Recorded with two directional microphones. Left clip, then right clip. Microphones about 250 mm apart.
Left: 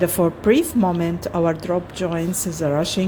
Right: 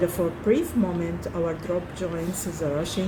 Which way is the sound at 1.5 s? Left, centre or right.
Left.